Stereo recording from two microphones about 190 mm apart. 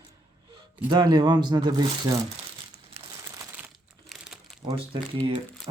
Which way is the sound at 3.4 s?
10° right (ahead or behind).